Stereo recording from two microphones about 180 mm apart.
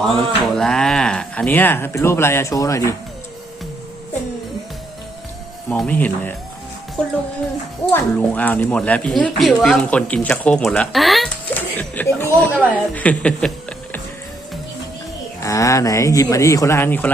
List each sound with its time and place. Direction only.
0.0 s speech: centre (ahead or behind)
5.6 s speech: 5° left (ahead or behind)
7.9 s speech: 10° left (ahead or behind)
15.4 s speech: 20° left (ahead or behind)